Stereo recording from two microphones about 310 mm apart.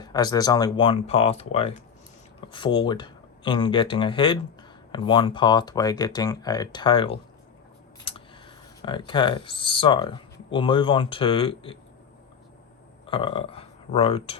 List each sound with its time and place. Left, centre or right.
0.0 s speech: centre
8.8 s speech: centre
13.1 s speech: centre